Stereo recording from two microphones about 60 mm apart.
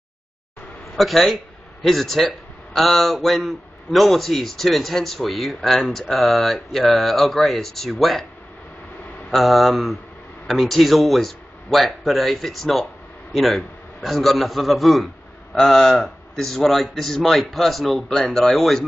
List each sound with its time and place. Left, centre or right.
0.9 s a man's voice: centre
9.3 s a man's voice: centre